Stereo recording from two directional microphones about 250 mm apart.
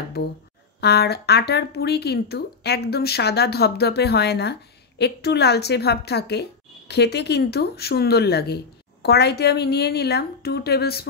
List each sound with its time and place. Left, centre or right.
0.7 s speech: left